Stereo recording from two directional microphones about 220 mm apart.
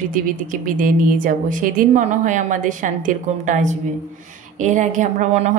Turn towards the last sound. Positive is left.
turn(degrees=-30)  # may be behind; listen again after turning